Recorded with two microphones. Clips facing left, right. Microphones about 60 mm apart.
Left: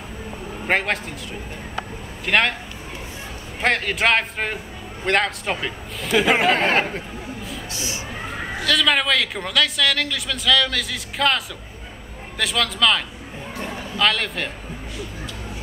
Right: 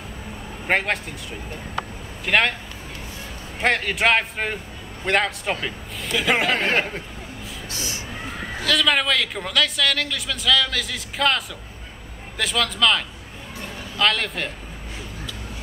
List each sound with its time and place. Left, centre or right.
0.7 s a woman's voice: centre
2.2 s a woman's voice: centre
3.6 s a woman's voice: centre
7.7 s a sound: right
8.6 s a woman's voice: centre